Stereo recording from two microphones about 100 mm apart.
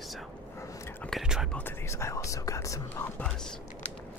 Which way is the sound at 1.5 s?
25° left (ahead or behind).